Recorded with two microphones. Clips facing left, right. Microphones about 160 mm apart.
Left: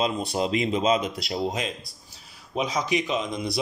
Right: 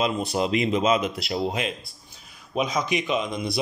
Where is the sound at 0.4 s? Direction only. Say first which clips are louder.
Right 1 dB; 35° left (ahead or behind).